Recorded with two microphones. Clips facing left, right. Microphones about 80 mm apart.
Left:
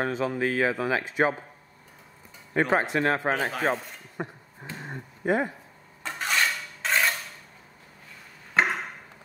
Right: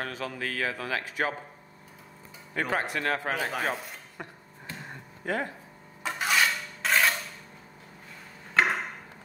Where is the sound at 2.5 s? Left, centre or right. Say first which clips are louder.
Left 6 dB; left.